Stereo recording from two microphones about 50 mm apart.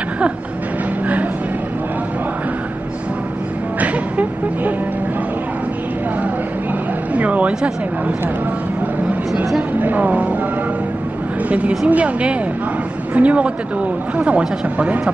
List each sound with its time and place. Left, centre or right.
3.8 s music: right
7.2 s a sound: right
9.8 s speech: right
11.9 s speech: right